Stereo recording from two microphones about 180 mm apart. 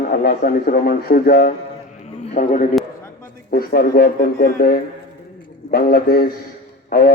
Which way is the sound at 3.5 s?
55° left (ahead or behind).